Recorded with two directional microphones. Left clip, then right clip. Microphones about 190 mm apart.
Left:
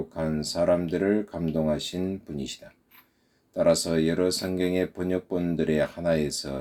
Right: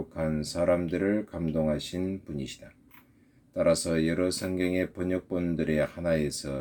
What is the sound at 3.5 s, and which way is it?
Speech, 45° right (ahead or behind).